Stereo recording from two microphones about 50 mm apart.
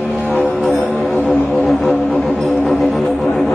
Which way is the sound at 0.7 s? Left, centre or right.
Left.